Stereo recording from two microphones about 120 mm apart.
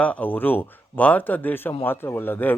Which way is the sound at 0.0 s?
10° left (ahead or behind).